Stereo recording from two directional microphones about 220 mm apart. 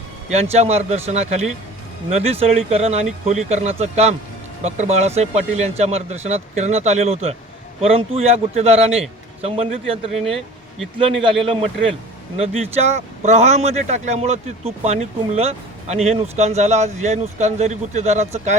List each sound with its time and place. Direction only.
0.5 s speech: 30° right (ahead or behind)
10.2 s speech: centre (ahead or behind)
11.2 s speech: 25° right (ahead or behind)